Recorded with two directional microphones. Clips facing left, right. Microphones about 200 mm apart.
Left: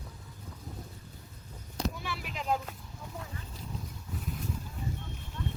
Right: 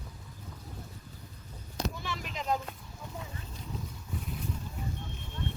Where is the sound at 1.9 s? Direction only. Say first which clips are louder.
Even; 10° left (ahead or behind).